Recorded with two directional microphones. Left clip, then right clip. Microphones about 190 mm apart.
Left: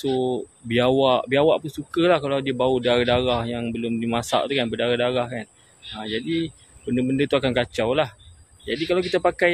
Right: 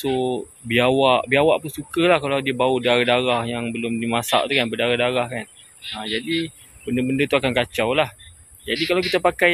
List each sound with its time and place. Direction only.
0.0 s a man's voice: 5° right (ahead or behind)